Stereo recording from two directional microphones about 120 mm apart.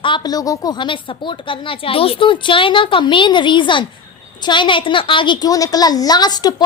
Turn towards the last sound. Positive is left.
turn(degrees=35)  # may be behind; listen again after turning